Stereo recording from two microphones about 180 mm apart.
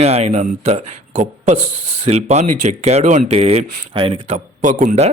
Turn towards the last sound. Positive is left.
turn(degrees=-40)  # may be behind; listen again after turning